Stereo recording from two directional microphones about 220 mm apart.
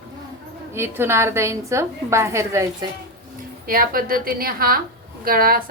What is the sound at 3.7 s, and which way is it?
A woman's voice, 40° right (ahead or behind).